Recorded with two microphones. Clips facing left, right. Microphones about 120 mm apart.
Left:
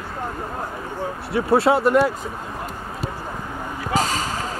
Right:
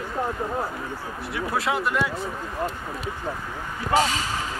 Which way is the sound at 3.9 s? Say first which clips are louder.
Right 1 dB; 40° left (ahead or behind).